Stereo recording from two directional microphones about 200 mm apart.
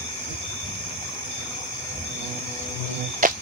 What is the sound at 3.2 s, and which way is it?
Music, 45° right (ahead or behind).